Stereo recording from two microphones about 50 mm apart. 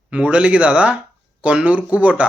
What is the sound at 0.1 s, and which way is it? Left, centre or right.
Speech, right.